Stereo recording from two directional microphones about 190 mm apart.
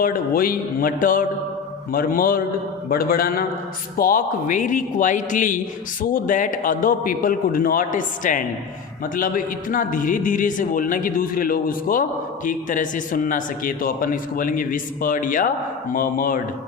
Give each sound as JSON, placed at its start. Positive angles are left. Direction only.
{"t": 0.0, "sound": "a man's voice", "side_deg": 50}